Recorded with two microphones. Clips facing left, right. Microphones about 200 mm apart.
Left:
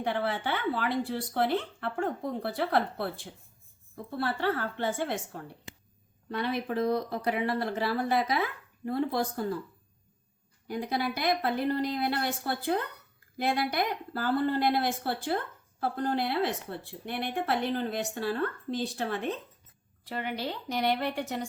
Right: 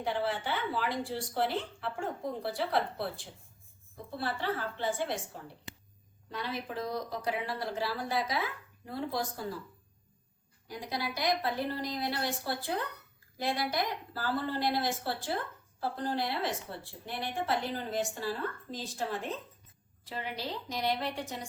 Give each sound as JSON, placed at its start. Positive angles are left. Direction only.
{"t": 0.0, "sound": "a woman's voice", "side_deg": 60}
{"t": 4.4, "sound": "a woman's voice", "side_deg": 55}
{"t": 10.7, "sound": "a woman's voice", "side_deg": 55}